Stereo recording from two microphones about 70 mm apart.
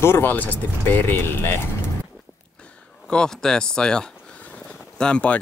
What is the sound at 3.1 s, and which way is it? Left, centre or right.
Speech, centre.